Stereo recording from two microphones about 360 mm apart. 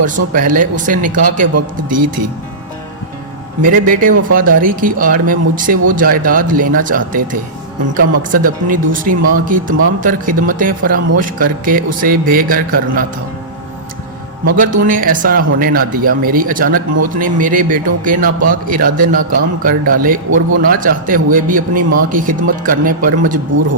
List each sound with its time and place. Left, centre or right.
0.0 s speech: right
1.5 s a man's voice: right
3.6 s speech: right
14.5 s speech: right